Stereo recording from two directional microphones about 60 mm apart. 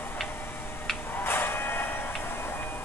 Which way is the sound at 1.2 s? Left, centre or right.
Left.